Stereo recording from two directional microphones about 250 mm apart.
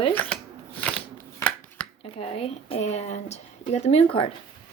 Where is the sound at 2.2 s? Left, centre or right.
Left.